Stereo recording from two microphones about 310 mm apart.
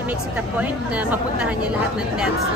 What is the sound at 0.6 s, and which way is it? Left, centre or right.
Speech, centre.